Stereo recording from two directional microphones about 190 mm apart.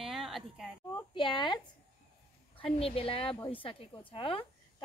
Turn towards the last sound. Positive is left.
turn(degrees=30)  # may be behind; listen again after turning